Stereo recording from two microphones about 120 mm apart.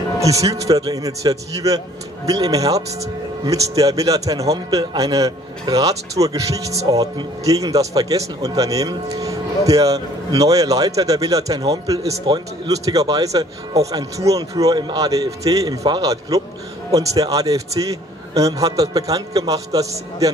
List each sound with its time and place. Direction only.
0.2 s a man's voice: 30° right (ahead or behind)